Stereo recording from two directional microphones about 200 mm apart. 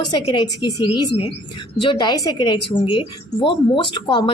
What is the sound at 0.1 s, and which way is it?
A man's voice, 20° left (ahead or behind).